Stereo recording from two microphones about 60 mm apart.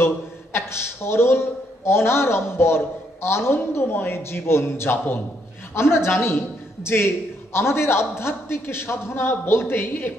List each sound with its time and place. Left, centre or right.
0.0 s a man's voice: left